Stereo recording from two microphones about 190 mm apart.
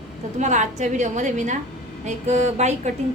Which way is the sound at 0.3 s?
40° right (ahead or behind).